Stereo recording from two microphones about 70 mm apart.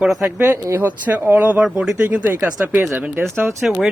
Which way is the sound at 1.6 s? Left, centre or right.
Centre.